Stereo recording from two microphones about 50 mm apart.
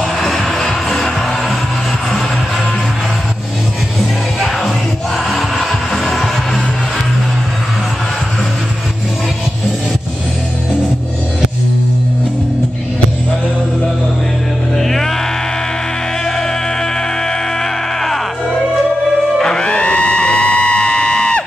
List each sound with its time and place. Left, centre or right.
0.0 s music: centre
4.4 s music: centre
14.8 s music: centre
19.3 s music: centre